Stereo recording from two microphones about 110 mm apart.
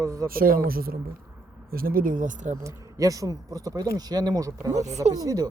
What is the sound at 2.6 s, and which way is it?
Speech, 30° right (ahead or behind).